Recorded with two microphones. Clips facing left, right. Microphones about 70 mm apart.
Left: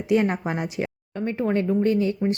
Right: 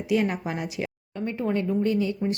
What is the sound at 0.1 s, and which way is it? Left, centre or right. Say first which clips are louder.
A woman's voice: left 3 dB; left.